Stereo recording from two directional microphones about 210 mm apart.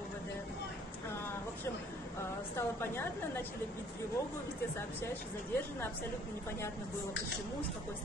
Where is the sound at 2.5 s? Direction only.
10° left (ahead or behind).